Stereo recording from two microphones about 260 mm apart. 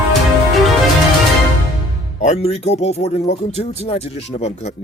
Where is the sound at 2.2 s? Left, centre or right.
Left.